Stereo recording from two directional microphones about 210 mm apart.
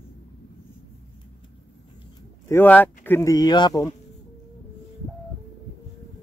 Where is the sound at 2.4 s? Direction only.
10° left (ahead or behind).